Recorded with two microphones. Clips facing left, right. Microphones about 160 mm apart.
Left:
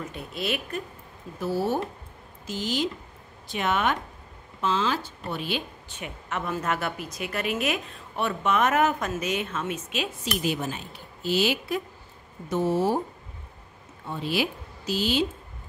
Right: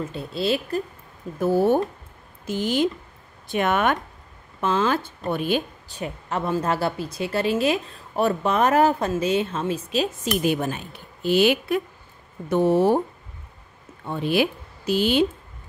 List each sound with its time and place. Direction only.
0.1 s a woman's voice: 30° right (ahead or behind)
1.4 s speech: 50° right (ahead or behind)
5.9 s speech: 35° right (ahead or behind)
10.4 s speech: 55° right (ahead or behind)
14.0 s speech: 55° right (ahead or behind)